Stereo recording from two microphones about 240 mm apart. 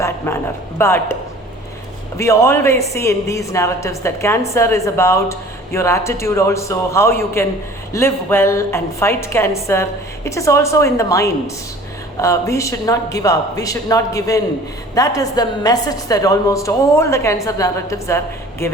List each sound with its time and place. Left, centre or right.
0.3 s a woman's voice: centre
2.1 s a woman's voice: centre